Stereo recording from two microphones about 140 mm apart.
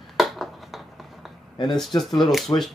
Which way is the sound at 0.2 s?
Centre (ahead or behind).